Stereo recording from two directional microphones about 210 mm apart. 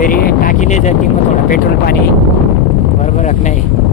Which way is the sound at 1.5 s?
45° left (ahead or behind).